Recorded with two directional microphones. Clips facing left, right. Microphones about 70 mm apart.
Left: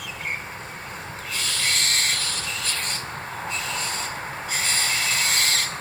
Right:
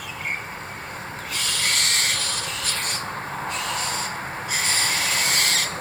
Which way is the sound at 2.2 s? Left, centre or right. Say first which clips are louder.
Right 1 dB; right.